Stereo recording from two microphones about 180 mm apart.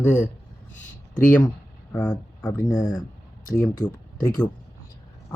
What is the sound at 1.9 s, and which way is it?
Speech, 10° left (ahead or behind).